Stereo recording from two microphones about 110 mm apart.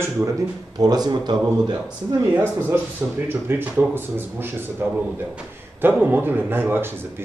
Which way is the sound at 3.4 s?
20° right (ahead or behind).